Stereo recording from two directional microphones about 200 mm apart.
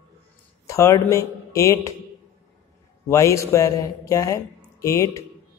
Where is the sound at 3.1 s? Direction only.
15° left (ahead or behind).